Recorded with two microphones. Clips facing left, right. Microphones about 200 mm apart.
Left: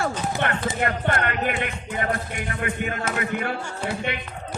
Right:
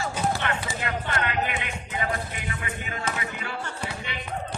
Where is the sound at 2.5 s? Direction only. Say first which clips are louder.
Left 7 dB; 60° left (ahead or behind).